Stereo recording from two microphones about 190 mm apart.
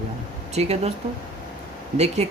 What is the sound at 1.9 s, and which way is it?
Speech, 35° right (ahead or behind).